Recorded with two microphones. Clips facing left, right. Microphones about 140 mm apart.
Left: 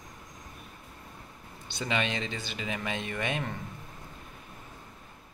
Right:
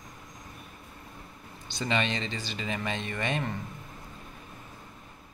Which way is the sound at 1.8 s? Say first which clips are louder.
Right 1 dB; 10° left (ahead or behind).